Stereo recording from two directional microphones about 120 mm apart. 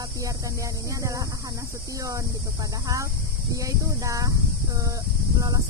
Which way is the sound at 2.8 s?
25° right (ahead or behind).